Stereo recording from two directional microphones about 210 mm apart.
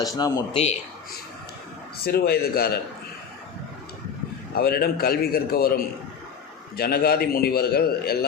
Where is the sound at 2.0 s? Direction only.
50° left (ahead or behind).